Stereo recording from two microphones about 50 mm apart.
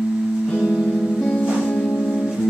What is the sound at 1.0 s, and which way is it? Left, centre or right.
Music, centre.